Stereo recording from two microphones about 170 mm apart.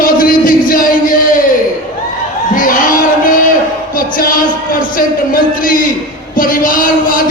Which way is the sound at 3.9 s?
55° left (ahead or behind).